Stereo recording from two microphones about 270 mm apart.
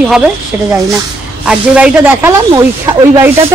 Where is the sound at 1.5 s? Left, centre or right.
Centre.